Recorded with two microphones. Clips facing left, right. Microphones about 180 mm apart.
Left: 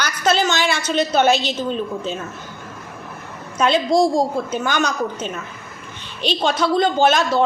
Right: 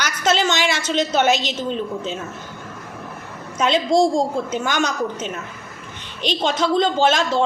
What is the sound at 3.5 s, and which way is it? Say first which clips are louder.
A woman's voice: left 1 dB; 20° right (ahead or behind).